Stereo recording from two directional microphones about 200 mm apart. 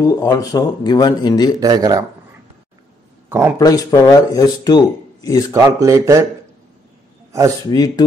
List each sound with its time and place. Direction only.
0.0 s speech: 20° left (ahead or behind)
1.6 s speech: 20° right (ahead or behind)
3.3 s speech: 10° right (ahead or behind)
3.5 s speech: 15° left (ahead or behind)
5.5 s speech: 15° right (ahead or behind)
7.7 s speech: 20° left (ahead or behind)